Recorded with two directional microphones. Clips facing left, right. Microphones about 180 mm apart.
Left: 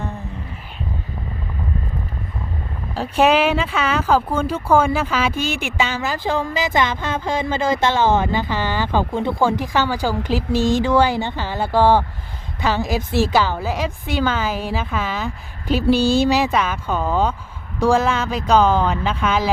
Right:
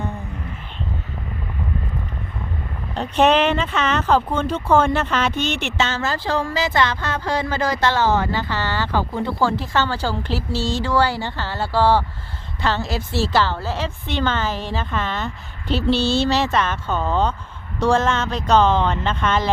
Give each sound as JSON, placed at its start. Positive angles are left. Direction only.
{"t": 2.9, "sound": "speech", "side_deg": 5}